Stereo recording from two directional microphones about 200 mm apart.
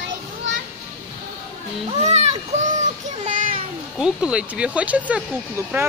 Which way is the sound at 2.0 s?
35° right (ahead or behind).